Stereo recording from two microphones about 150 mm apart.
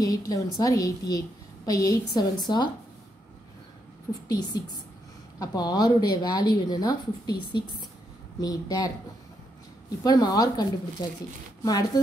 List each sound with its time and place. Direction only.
0.0 s speech: 25° left (ahead or behind)
4.3 s speech: 25° left (ahead or behind)
10.0 s speech: 25° left (ahead or behind)